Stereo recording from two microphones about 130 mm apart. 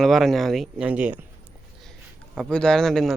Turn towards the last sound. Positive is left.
turn(degrees=5)  # may be behind; listen again after turning